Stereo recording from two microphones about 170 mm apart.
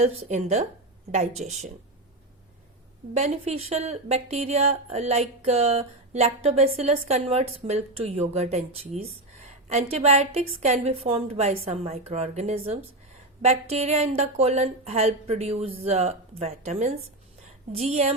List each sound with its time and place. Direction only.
0.0 s speech: 35° right (ahead or behind)
3.2 s a woman's voice: 40° right (ahead or behind)